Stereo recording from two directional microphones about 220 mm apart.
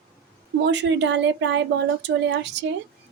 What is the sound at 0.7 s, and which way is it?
Speech, 55° right (ahead or behind).